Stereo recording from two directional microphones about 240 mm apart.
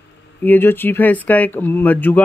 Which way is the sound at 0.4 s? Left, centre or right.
Centre.